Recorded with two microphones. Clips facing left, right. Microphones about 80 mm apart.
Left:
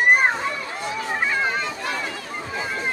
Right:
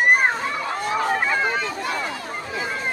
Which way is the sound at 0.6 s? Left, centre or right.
Right.